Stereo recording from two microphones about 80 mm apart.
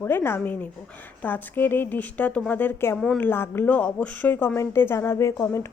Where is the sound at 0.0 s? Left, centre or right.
Left.